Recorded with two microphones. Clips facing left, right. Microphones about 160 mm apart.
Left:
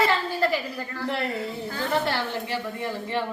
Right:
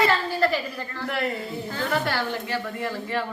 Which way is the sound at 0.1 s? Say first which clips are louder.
Right 1 dB; 15° left (ahead or behind).